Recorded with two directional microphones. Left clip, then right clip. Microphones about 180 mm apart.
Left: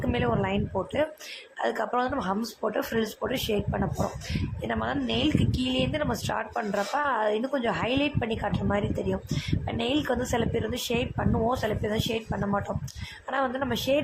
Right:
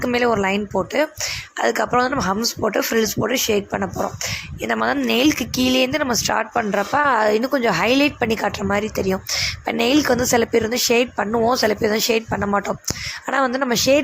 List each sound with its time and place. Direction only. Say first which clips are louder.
0.0 s speech: right 9 dB; 25° right (ahead or behind)
4.8 s speech: right 10 dB; 35° right (ahead or behind)